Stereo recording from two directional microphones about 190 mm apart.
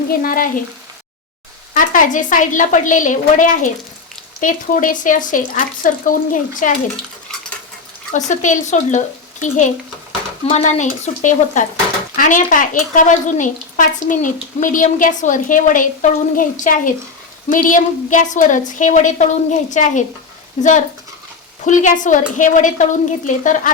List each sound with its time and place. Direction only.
0.1 s a woman's voice: 50° left (ahead or behind)
1.7 s a woman's voice: 45° left (ahead or behind)
8.1 s a woman's voice: 40° left (ahead or behind)